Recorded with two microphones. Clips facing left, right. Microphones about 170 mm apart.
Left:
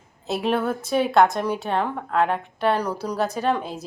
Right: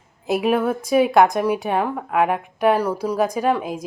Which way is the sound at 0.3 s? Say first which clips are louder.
Right 4 dB; 10° right (ahead or behind).